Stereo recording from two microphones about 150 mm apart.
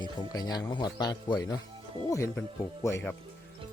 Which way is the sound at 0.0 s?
25° left (ahead or behind).